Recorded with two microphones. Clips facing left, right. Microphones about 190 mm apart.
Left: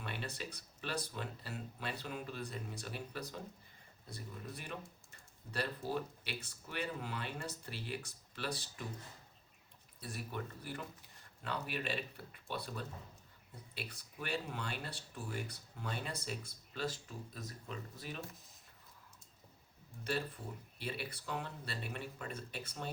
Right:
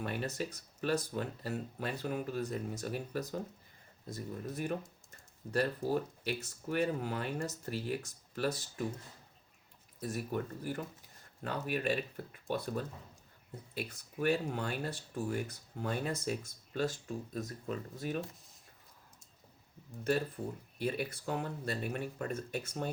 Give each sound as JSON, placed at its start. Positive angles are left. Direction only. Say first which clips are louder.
{"t": 0.0, "sound": "speech", "louder": "right 7 dB", "side_deg": -45}
{"t": 10.0, "sound": "speech", "louder": "right 7 dB", "side_deg": -45}
{"t": 20.7, "sound": "speech", "louder": "right 8 dB", "side_deg": -45}